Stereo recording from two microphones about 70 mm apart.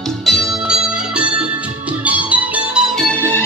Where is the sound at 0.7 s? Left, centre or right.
Centre.